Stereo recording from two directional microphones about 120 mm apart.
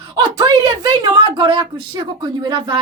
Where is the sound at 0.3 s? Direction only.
35° right (ahead or behind).